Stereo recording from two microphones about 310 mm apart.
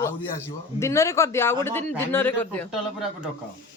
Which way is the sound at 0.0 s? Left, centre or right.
Centre.